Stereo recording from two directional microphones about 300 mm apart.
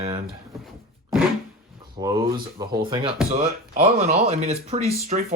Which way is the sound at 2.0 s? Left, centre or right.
Centre.